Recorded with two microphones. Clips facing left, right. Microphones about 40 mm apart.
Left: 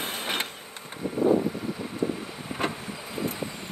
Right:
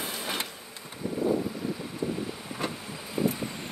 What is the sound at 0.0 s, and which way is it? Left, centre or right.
Printer, left.